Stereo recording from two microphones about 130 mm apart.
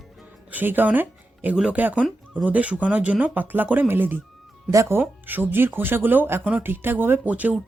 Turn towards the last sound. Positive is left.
turn(degrees=-10)  # may be behind; listen again after turning